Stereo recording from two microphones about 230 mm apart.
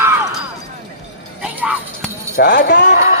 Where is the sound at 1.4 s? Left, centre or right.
Centre.